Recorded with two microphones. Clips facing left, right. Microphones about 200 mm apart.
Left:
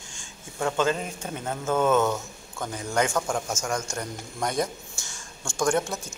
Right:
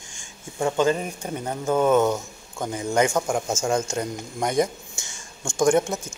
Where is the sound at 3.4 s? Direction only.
25° right (ahead or behind).